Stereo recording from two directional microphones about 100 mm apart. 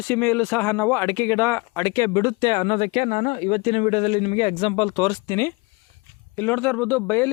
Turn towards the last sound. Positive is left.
turn(degrees=20)  # may be behind; listen again after turning